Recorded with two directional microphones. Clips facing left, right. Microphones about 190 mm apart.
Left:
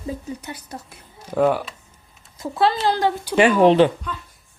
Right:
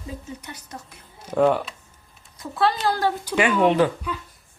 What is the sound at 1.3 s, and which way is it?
Speech, 5° left (ahead or behind).